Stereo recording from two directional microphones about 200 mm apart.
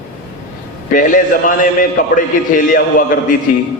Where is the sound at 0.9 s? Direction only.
40° left (ahead or behind).